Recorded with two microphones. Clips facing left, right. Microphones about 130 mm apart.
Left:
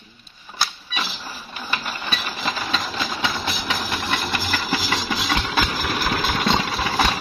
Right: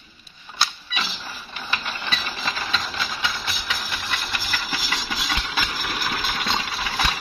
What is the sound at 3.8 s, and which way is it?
Engine, 50° left (ahead or behind).